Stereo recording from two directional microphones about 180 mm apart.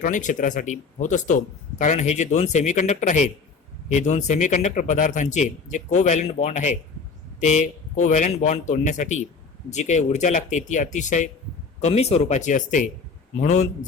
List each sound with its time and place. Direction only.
0.0 s a man's voice: 45° left (ahead or behind)